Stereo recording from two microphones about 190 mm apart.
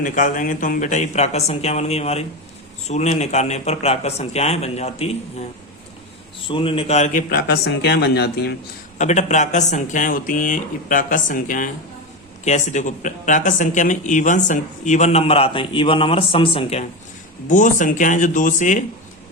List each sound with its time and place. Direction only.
0.0 s speech: 45° left (ahead or behind)
6.5 s speech: 25° left (ahead or behind); by 8.5 s 60° left (ahead or behind)
9.0 s speech: 40° left (ahead or behind)
17.5 s speech: 40° left (ahead or behind)